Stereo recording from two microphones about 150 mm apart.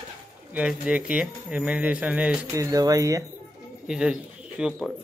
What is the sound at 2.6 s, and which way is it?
Speech, 25° right (ahead or behind).